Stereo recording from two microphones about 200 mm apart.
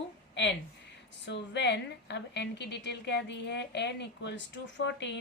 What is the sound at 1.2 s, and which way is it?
A woman's voice, 60° left (ahead or behind).